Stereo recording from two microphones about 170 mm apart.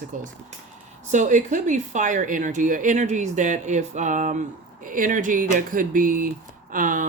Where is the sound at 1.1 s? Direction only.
45° right (ahead or behind).